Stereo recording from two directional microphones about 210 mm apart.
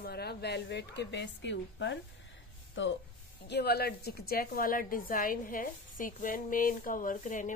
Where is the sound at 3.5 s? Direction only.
50° left (ahead or behind).